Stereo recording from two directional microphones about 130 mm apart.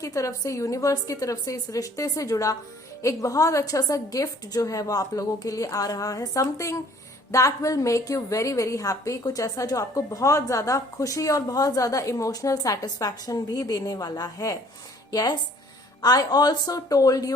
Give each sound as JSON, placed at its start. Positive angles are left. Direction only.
{"t": 0.0, "sound": "a woman's voice", "side_deg": 25}